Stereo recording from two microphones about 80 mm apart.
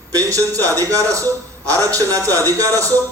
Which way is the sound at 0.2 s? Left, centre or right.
Right.